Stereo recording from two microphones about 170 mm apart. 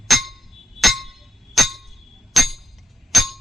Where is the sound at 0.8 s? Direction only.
Centre (ahead or behind).